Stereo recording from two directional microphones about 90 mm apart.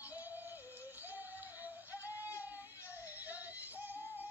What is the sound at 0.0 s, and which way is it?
Music, 20° right (ahead or behind).